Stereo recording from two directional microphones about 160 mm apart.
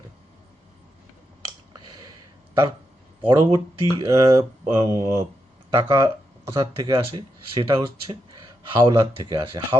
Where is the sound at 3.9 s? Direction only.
20° right (ahead or behind).